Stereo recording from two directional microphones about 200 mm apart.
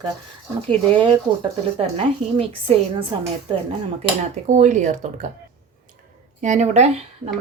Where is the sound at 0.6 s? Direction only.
25° right (ahead or behind).